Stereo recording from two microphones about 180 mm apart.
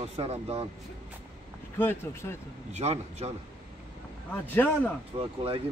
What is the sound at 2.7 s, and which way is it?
Speech, 35° right (ahead or behind).